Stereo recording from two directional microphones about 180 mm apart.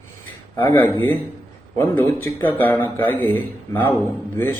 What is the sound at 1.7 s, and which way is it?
A man's voice, 15° left (ahead or behind).